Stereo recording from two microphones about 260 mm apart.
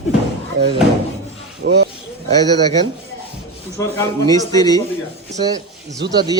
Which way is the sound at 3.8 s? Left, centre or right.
Centre.